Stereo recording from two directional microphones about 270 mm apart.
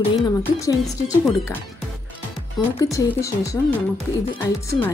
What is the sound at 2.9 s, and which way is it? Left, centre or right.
Speech, centre.